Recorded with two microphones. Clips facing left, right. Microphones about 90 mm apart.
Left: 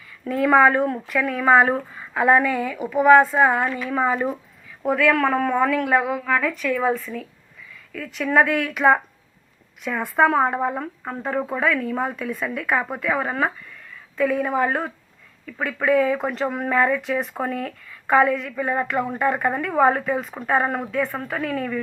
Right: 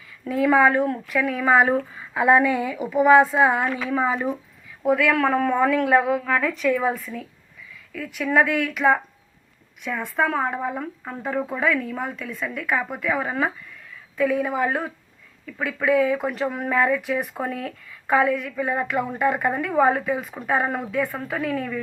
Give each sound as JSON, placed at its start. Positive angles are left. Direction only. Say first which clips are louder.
{"t": 0.3, "sound": "a woman's voice", "louder": "left 1 dB", "side_deg": -5}
{"t": 5.9, "sound": "speech", "louder": "right 1 dB", "side_deg": -25}
{"t": 6.7, "sound": "a woman's voice", "louder": "left 2 dB", "side_deg": -10}
{"t": 10.2, "sound": "a woman's voice", "louder": "left 5 dB", "side_deg": 10}